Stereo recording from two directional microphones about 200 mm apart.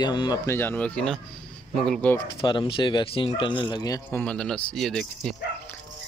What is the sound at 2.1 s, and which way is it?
A man's voice, 25° left (ahead or behind).